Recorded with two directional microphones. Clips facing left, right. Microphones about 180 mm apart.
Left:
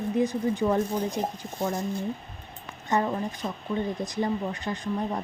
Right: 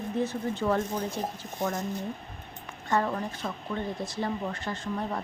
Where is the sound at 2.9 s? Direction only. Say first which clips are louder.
Left 2 dB; 15° left (ahead or behind).